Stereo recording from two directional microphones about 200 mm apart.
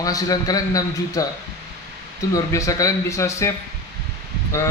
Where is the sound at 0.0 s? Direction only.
15° left (ahead or behind).